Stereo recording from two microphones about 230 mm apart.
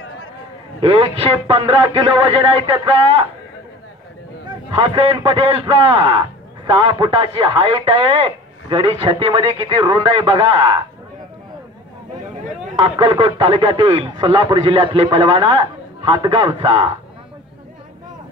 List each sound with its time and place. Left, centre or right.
0.7 s a man's voice: right
4.6 s a man's voice: right
13.0 s a man's voice: right